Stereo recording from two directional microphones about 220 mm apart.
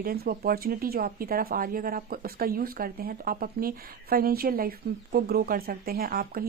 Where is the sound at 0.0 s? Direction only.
45° right (ahead or behind).